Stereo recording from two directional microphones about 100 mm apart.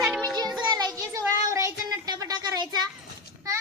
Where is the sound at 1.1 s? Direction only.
30° right (ahead or behind).